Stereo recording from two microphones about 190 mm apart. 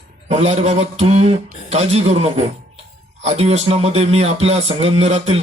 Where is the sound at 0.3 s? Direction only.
35° right (ahead or behind).